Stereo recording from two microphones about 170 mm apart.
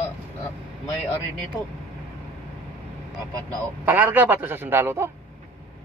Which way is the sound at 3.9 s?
10° right (ahead or behind).